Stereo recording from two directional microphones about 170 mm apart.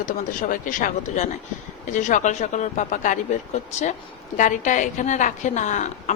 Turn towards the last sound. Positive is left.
turn(degrees=45)  # may be behind; listen again after turning